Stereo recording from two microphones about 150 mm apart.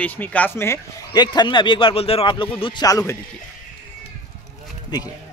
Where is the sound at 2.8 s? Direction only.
25° left (ahead or behind).